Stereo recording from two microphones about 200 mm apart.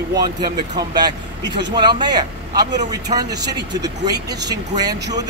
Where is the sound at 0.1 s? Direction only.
20° right (ahead or behind).